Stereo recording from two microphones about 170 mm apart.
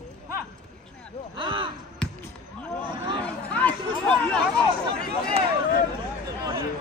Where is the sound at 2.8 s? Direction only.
30° right (ahead or behind).